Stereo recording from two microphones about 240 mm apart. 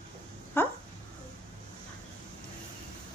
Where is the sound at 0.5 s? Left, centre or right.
Centre.